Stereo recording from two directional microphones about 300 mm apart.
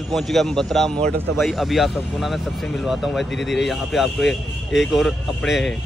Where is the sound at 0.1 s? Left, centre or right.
Centre.